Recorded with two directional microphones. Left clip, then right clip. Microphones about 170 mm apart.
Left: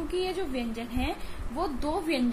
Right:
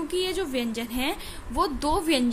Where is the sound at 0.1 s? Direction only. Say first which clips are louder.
Right 3 dB; 45° right (ahead or behind).